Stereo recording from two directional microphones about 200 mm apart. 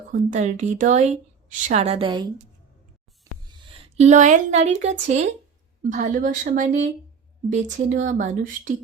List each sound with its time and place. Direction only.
0.1 s speech: 40° right (ahead or behind); by 2.3 s 25° right (ahead or behind)
3.8 s speech: 35° right (ahead or behind)